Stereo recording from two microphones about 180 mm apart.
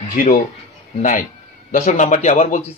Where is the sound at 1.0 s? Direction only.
45° left (ahead or behind).